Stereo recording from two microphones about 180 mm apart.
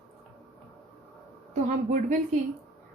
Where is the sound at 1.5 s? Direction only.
45° right (ahead or behind).